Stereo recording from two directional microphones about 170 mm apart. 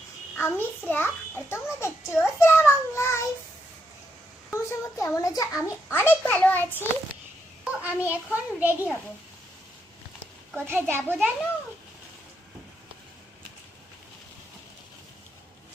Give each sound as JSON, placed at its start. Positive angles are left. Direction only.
{"t": 0.3, "sound": "a child's voice", "side_deg": 10}
{"t": 4.5, "sound": "a child's voice", "side_deg": 15}
{"t": 7.6, "sound": "a child's voice", "side_deg": -10}
{"t": 10.5, "sound": "a child's voice", "side_deg": -10}